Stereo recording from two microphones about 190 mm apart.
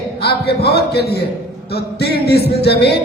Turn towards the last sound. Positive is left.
turn(degrees=60)  # may be behind; listen again after turning